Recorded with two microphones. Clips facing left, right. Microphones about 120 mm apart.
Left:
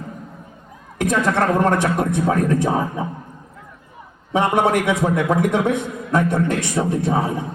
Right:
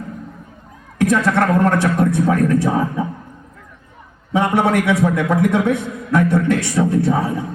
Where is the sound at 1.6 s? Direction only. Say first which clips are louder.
Right 2 dB; 20° left (ahead or behind).